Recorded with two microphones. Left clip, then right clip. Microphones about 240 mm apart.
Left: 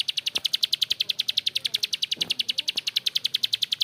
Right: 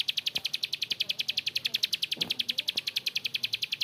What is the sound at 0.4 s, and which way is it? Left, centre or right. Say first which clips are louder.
Bird: left 8 dB; left.